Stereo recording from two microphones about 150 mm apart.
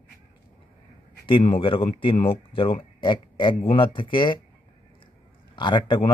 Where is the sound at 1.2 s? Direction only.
35° left (ahead or behind).